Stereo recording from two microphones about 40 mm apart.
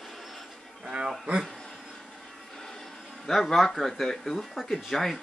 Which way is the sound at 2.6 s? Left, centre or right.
Centre.